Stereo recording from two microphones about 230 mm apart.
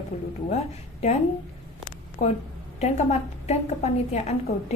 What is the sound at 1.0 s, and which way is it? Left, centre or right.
Speech, left.